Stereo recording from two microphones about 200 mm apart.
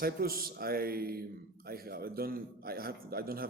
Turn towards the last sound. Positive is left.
turn(degrees=-50)  # may be behind; listen again after turning